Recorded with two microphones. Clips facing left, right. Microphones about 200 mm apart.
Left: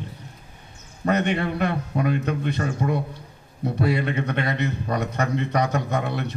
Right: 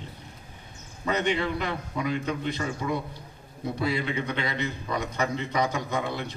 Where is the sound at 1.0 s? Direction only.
60° left (ahead or behind).